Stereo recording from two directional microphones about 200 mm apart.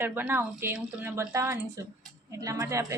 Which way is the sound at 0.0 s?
10° right (ahead or behind).